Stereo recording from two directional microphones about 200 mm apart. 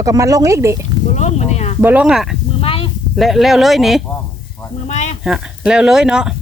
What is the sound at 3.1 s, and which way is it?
Speech, centre (ahead or behind).